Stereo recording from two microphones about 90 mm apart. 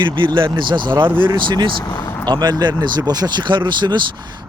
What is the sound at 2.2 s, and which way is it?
Speech, 55° right (ahead or behind).